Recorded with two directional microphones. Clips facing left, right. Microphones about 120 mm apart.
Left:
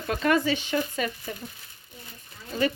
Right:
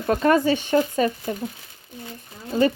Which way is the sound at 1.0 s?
35° right (ahead or behind).